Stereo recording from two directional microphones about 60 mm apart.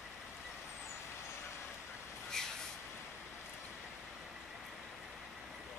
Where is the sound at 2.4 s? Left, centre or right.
Centre.